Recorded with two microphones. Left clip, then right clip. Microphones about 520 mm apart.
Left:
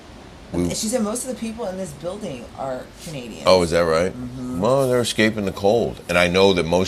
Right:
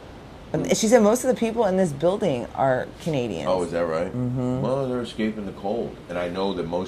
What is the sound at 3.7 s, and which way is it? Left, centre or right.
Speech, left.